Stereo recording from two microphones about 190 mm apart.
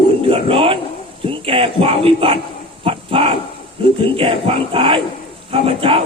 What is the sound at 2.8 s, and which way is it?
Dog, 30° right (ahead or behind).